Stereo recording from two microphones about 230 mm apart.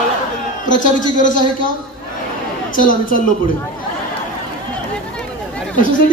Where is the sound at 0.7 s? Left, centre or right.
Left.